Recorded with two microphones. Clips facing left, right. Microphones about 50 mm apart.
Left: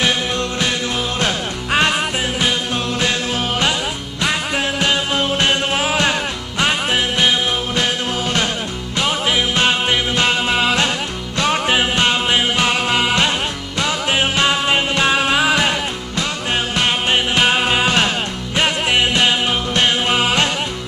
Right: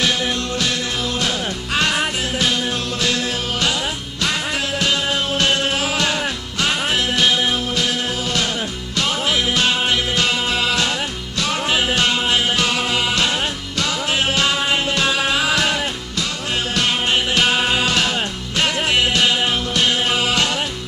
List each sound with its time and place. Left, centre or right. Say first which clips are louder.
1.2 s music: left 2 dB; left
4.2 s music: left 3 dB; left
7.7 s music: left 2 dB; left
8.9 s music: left 2 dB; centre
16.7 s music: left 1 dB; left